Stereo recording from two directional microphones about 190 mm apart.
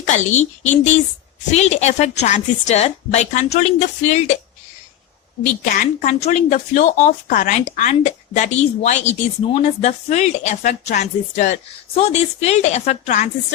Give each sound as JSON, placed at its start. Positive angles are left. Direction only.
{"t": 0.0, "sound": "speech", "side_deg": 40}
{"t": 5.4, "sound": "speech", "side_deg": 45}